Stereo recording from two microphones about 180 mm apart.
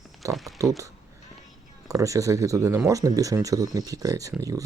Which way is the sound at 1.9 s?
20° right (ahead or behind).